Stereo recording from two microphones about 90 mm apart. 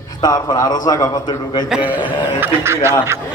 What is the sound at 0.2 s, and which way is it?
A man's voice, 50° left (ahead or behind).